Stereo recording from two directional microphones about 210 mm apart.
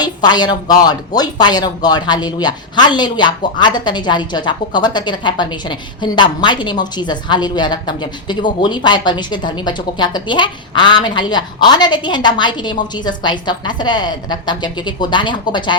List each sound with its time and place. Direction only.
0.0 s speech: 20° left (ahead or behind)